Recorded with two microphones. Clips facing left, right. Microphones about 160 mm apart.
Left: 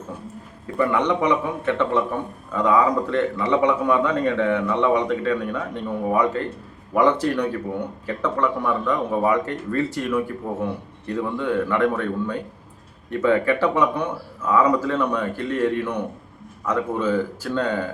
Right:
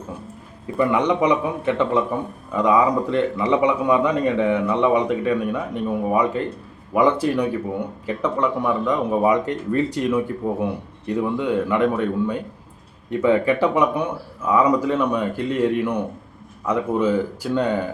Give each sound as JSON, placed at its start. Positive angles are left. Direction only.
{"t": 0.8, "sound": "speech", "side_deg": -15}